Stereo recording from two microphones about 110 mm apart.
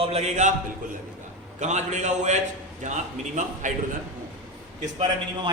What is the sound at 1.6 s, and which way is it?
Speech, 90° right.